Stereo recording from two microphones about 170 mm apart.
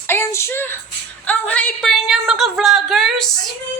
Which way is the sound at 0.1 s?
15° left (ahead or behind).